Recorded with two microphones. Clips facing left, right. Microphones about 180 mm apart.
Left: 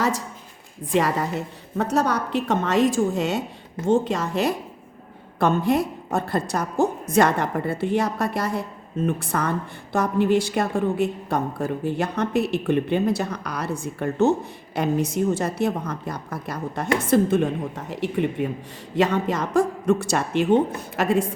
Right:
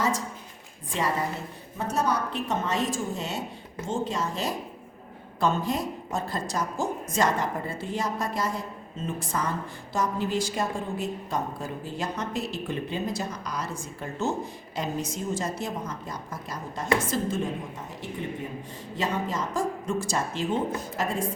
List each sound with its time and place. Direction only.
0.9 s a woman's voice: 65° left (ahead or behind)